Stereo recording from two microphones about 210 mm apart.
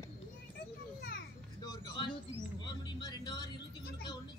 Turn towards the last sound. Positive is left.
turn(degrees=20)  # may be behind; listen again after turning